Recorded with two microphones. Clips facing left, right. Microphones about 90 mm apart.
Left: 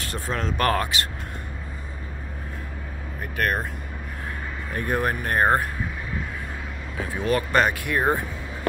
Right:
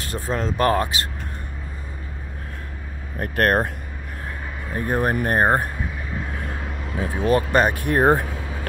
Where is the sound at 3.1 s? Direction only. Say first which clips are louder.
Right 6 dB; 50° right (ahead or behind).